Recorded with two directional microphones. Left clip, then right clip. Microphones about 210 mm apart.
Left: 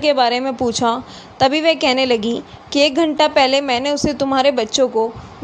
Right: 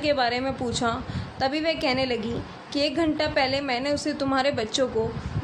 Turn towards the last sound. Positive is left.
turn(degrees=25)  # may be behind; listen again after turning